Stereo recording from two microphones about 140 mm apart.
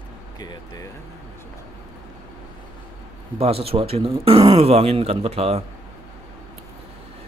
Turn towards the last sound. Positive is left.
turn(degrees=-50)  # may be behind; listen again after turning